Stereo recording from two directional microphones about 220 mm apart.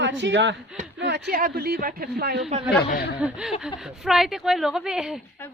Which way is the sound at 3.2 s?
5° right (ahead or behind).